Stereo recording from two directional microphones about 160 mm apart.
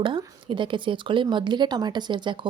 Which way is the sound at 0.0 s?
30° right (ahead or behind).